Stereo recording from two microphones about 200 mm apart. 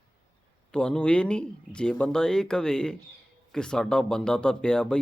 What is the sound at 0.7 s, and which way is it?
Speech, 5° left (ahead or behind).